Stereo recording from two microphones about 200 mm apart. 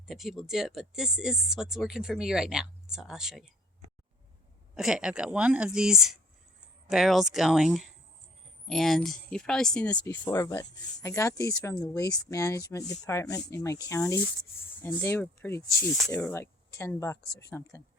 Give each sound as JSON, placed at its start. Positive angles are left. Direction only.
{"t": 0.1, "sound": "speech", "side_deg": 0}
{"t": 4.7, "sound": "speech", "side_deg": -5}